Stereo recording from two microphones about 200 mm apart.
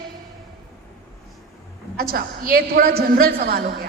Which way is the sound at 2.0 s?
50° right (ahead or behind).